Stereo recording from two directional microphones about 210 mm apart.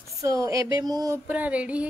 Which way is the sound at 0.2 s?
15° right (ahead or behind).